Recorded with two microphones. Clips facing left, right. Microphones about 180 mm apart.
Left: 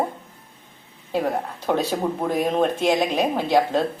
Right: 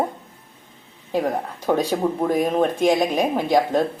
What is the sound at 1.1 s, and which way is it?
A woman's voice, 10° right (ahead or behind).